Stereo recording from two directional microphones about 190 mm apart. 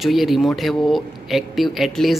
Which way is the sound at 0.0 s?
Centre (ahead or behind).